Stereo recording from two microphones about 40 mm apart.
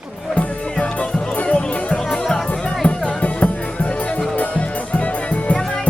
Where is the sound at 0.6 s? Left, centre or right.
Left.